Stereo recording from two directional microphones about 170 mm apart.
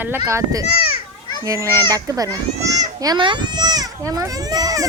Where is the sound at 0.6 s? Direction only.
35° left (ahead or behind).